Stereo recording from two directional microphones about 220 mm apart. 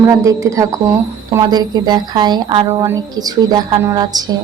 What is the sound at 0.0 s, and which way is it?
A woman's voice, 15° right (ahead or behind).